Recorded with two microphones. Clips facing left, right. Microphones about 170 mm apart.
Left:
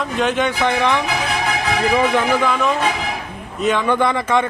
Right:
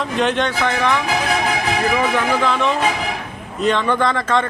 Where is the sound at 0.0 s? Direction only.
Centre (ahead or behind).